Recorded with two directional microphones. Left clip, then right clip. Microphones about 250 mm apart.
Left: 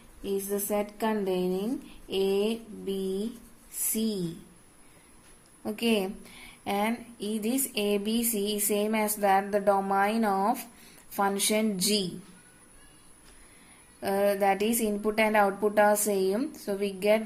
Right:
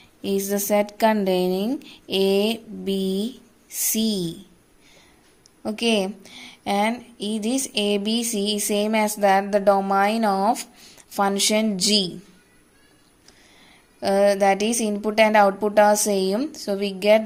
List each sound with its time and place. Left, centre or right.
0.2 s a woman's voice: right
5.6 s a woman's voice: right
14.0 s a woman's voice: right